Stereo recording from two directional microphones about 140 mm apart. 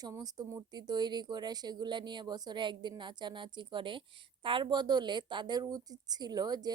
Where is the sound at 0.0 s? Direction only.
25° right (ahead or behind).